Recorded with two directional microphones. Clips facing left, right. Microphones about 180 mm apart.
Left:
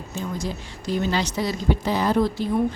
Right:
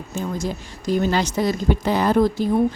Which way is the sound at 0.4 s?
50° right (ahead or behind).